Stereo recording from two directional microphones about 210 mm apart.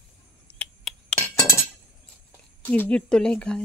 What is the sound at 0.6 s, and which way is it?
Glass, 5° left (ahead or behind).